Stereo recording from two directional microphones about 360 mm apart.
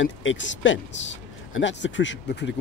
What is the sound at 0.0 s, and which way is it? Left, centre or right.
Speech, left.